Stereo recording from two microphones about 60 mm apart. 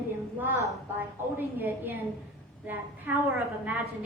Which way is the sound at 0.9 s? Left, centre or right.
Right.